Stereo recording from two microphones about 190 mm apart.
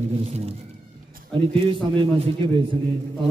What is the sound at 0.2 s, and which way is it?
Speech, 35° right (ahead or behind).